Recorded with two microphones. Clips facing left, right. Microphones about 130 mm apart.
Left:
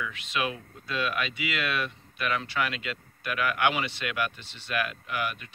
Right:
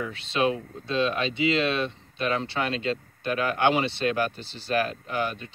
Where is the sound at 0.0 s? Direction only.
30° right (ahead or behind).